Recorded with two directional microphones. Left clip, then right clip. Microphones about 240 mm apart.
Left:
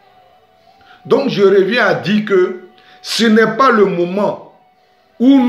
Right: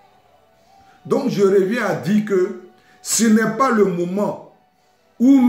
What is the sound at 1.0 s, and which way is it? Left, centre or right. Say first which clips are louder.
Speech: left 6 dB; centre.